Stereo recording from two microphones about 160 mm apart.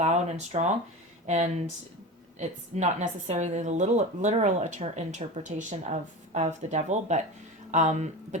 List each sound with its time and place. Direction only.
0.0 s a woman's voice: 45° right (ahead or behind)
2.4 s a woman's voice: 45° right (ahead or behind)